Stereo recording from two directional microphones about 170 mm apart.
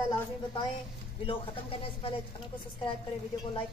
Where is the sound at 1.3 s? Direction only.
35° left (ahead or behind).